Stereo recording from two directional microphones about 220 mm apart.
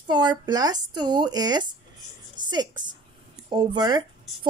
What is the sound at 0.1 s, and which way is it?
Speech, 20° right (ahead or behind).